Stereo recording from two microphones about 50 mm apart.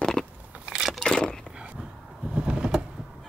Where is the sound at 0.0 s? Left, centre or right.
Centre.